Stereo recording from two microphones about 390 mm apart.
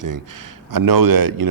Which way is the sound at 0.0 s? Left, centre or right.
Right.